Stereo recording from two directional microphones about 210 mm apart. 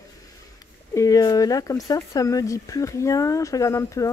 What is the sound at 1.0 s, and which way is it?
Speech, 15° left (ahead or behind).